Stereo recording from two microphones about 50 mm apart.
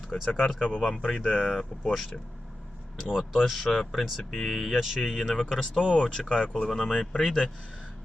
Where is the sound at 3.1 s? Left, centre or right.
Centre.